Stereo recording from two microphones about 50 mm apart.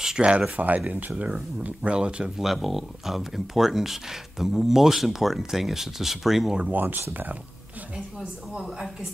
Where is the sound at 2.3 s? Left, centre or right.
Centre.